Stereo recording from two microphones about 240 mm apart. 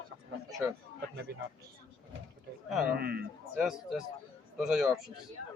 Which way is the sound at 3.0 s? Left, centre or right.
Right.